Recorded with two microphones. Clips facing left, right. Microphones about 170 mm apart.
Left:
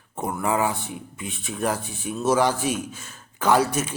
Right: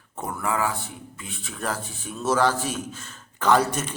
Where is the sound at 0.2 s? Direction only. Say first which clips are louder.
Left 3 dB; 20° left (ahead or behind).